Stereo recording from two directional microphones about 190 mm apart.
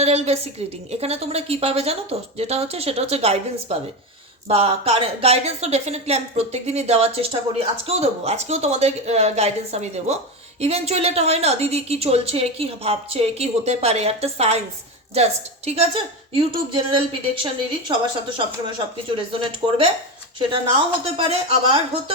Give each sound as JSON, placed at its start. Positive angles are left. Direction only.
{"t": 0.0, "sound": "a woman's voice", "side_deg": -35}
{"t": 21.2, "sound": "a woman's voice", "side_deg": -25}